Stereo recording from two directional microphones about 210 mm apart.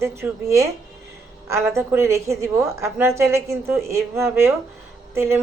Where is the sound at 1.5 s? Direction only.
15° right (ahead or behind).